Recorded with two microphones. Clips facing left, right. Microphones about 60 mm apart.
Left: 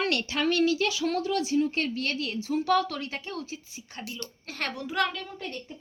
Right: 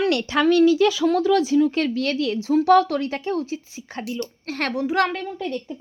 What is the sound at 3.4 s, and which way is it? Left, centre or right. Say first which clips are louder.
Speech: right 10 dB; right.